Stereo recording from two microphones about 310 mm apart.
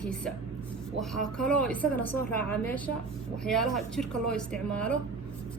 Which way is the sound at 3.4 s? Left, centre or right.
Centre.